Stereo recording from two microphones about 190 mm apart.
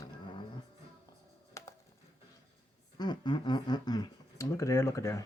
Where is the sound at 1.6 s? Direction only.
15° left (ahead or behind).